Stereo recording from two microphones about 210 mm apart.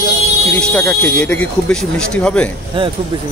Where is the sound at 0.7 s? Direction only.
5° left (ahead or behind).